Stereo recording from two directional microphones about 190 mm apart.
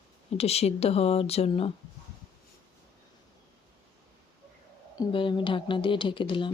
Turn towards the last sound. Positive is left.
turn(degrees=25)  # may be behind; listen again after turning